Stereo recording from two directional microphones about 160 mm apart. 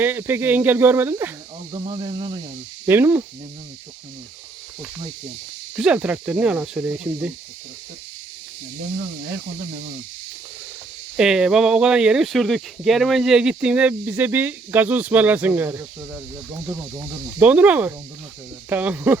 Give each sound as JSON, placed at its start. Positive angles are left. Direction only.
{"t": 0.0, "sound": "speech", "side_deg": -15}
{"t": 1.7, "sound": "speech", "side_deg": -30}
{"t": 2.8, "sound": "speech", "side_deg": -15}
{"t": 5.7, "sound": "speech", "side_deg": -5}
{"t": 11.2, "sound": "speech", "side_deg": -5}
{"t": 17.0, "sound": "speech", "side_deg": -10}